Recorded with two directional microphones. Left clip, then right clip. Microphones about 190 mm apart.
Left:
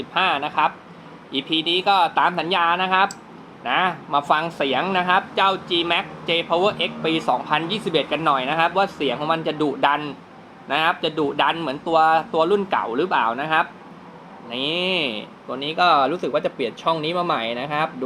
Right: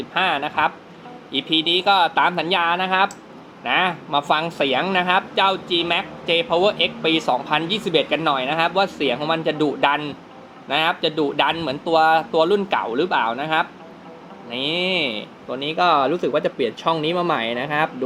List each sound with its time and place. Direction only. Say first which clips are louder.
0.1 s speech: even; 5° right (ahead or behind)